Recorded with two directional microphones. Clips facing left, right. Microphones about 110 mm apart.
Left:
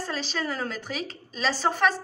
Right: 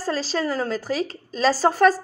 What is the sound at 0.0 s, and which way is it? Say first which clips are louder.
A woman's voice: right 6 dB; 35° right (ahead or behind).